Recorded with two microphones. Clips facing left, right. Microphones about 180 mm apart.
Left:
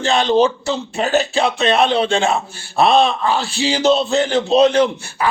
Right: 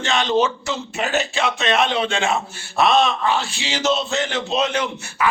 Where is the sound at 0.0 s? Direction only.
35° left (ahead or behind).